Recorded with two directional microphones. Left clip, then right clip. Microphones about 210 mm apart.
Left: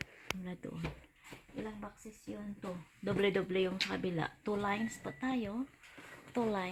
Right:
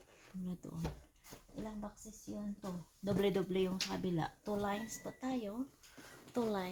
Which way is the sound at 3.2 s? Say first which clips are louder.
Left 3 dB; 15° left (ahead or behind).